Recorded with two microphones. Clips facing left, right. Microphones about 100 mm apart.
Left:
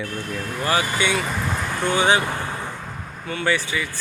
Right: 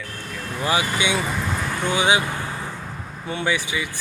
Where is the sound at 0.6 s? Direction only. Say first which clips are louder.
Even; 10° right (ahead or behind).